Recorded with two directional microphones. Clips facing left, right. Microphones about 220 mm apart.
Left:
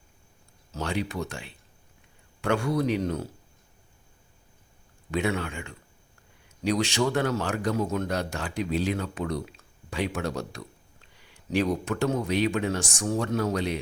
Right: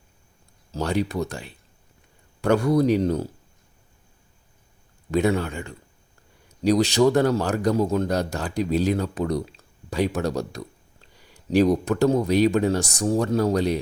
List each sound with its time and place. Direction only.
0.7 s speech: 40° right (ahead or behind)
5.1 s speech: 40° right (ahead or behind)